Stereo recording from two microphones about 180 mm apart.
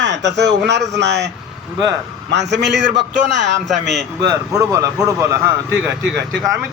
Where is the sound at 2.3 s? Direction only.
75° right (ahead or behind).